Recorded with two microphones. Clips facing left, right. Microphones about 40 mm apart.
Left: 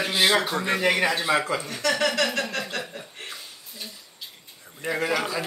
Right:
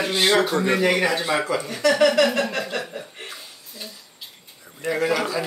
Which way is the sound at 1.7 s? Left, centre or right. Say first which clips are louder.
Right 8 dB; centre.